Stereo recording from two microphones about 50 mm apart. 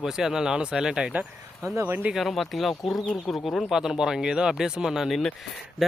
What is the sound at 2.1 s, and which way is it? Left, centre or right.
Speech, centre.